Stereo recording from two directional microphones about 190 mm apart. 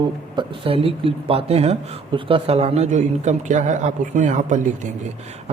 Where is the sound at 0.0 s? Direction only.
25° right (ahead or behind).